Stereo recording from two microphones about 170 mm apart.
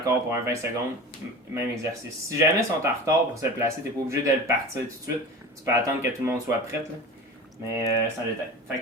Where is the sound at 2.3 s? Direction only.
15° right (ahead or behind).